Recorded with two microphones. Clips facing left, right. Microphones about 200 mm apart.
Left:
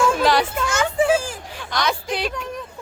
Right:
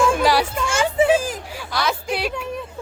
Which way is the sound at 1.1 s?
15° right (ahead or behind).